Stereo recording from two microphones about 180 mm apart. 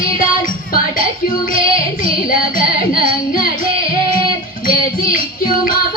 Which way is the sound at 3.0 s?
50° left (ahead or behind).